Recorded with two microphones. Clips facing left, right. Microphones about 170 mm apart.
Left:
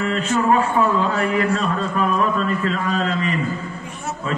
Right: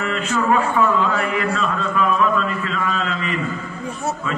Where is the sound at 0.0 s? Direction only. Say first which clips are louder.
Left 2 dB; 35° left (ahead or behind).